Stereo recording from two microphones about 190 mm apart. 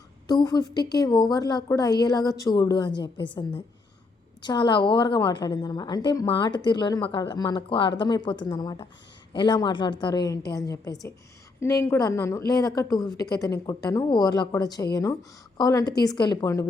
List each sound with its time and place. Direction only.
0.3 s a woman's voice: 20° left (ahead or behind)
4.4 s a woman's voice: 25° left (ahead or behind)